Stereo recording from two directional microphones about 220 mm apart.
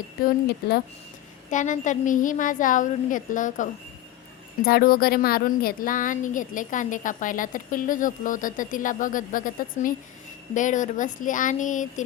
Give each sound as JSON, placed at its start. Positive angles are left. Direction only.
{"t": 0.3, "sound": "speech", "side_deg": 45}
{"t": 1.5, "sound": "speech", "side_deg": 35}